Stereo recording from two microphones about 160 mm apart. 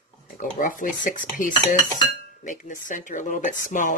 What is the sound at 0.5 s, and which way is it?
Speech, 55° left (ahead or behind).